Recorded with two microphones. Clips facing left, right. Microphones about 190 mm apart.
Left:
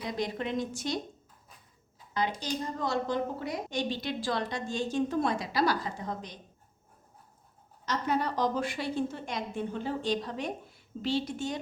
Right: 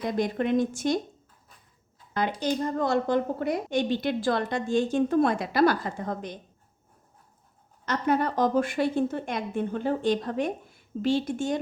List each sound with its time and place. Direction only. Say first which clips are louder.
0.0 s a woman's voice: right 6 dB; 50° right (ahead or behind)
2.4 s a woman's voice: right 7 dB; 55° right (ahead or behind)
7.9 s a woman's voice: right 5 dB; 55° right (ahead or behind)